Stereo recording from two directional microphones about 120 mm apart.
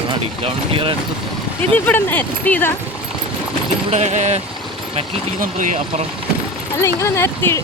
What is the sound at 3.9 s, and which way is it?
Speech, 70° right (ahead or behind).